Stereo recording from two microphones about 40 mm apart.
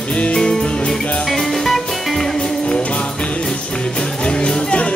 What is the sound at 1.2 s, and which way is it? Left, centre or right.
Music, centre.